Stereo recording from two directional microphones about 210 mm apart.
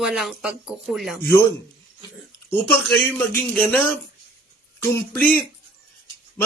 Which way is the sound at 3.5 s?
5° left (ahead or behind).